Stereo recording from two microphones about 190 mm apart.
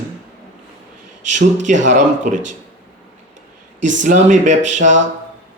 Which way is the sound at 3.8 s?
40° right (ahead or behind).